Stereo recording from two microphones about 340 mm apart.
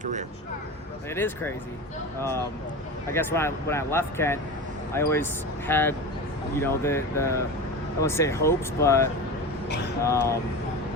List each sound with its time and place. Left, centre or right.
0.0 s speech: right
1.1 s speech: centre
3.1 s speech: centre
9.6 s speech: left
10.0 s speech: centre